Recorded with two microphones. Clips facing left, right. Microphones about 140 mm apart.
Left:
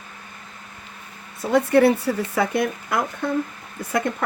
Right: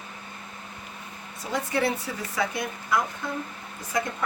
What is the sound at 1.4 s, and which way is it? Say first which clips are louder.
Speech: left 10 dB; 60° left (ahead or behind).